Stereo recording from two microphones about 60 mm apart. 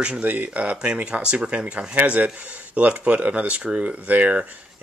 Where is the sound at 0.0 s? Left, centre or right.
Right.